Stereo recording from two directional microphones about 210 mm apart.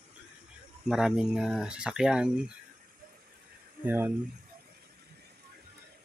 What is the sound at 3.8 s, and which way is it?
Speech, 10° right (ahead or behind).